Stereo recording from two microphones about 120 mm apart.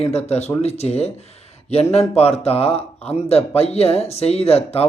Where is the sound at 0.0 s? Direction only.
60° left (ahead or behind).